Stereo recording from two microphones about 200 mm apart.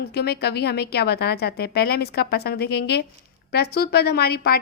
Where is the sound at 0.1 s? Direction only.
55° left (ahead or behind).